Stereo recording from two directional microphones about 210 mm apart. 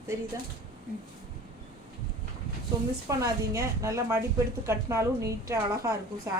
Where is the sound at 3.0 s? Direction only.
15° right (ahead or behind).